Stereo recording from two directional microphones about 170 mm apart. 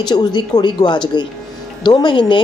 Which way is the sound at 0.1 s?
25° left (ahead or behind).